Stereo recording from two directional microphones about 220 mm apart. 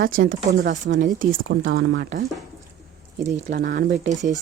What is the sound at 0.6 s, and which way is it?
Speech, 55° right (ahead or behind).